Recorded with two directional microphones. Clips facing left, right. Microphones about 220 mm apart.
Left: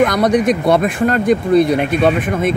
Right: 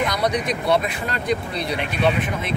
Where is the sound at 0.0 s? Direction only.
50° left (ahead or behind).